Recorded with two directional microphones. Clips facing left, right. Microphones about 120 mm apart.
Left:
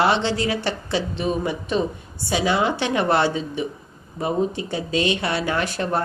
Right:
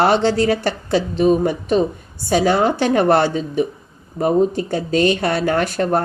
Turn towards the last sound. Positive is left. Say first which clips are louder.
# right 6 dB
turn(degrees=-45)  # may be behind; listen again after turning